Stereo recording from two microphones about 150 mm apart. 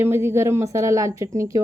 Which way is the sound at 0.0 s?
15° right (ahead or behind).